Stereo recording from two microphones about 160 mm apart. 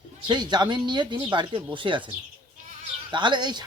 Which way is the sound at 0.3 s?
25° right (ahead or behind).